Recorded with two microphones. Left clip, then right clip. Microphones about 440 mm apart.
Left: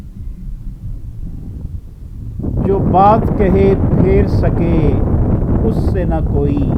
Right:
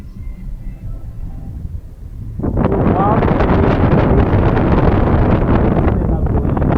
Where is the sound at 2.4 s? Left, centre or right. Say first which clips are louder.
Even; right.